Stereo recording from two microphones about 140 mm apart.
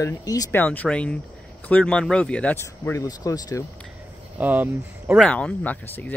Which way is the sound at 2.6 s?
20° left (ahead or behind).